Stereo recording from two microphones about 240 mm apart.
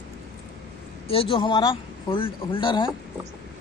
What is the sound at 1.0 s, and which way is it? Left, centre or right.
Speech, left.